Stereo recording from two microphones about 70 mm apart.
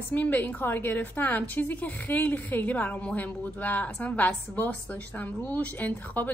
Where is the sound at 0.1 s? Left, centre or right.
Left.